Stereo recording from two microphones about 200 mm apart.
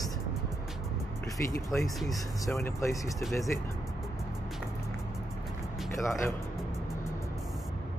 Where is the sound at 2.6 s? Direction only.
15° left (ahead or behind).